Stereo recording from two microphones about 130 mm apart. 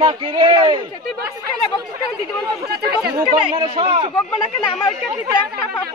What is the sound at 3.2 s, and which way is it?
Speech, 35° right (ahead or behind).